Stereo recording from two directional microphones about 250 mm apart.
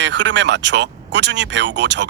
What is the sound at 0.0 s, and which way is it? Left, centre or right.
Speech, right.